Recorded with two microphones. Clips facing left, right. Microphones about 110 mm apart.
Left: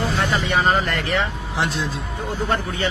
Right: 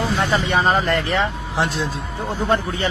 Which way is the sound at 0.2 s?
20° right (ahead or behind).